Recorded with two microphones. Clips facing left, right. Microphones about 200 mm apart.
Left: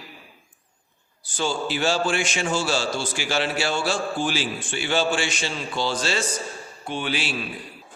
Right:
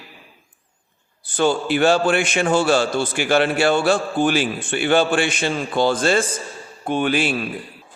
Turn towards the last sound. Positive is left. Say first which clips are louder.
# right 8 dB
turn(degrees=-55)  # may be behind; listen again after turning